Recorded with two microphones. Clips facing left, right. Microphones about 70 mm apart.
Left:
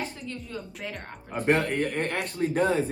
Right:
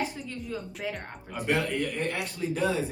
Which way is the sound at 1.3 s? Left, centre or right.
Left.